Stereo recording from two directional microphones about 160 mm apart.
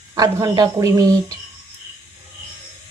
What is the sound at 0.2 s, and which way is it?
Speech, 25° right (ahead or behind).